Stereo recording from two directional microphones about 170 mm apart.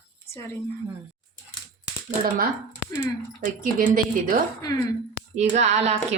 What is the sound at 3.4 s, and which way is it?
Speech, 55° right (ahead or behind).